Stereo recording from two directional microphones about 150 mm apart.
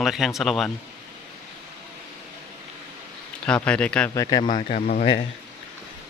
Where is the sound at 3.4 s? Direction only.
5° left (ahead or behind).